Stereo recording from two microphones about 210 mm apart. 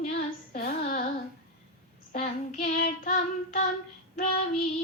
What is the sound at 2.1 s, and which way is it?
A woman's voice, 35° left (ahead or behind).